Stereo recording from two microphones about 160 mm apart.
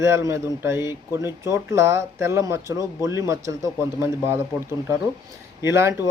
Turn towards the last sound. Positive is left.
turn(degrees=-15)  # may be behind; listen again after turning